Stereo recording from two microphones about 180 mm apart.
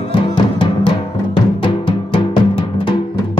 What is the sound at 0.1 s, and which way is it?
Music, 30° left (ahead or behind).